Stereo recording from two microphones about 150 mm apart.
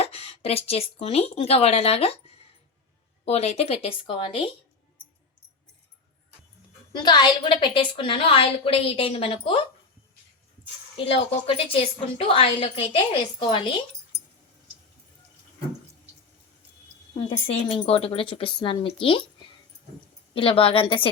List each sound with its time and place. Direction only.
0.0 s a woman's voice: 45° left (ahead or behind)
6.9 s a woman's voice: 30° left (ahead or behind)
10.9 s a woman's voice: 40° left (ahead or behind)
17.2 s a woman's voice: 35° left (ahead or behind)
20.3 s a woman's voice: 35° left (ahead or behind)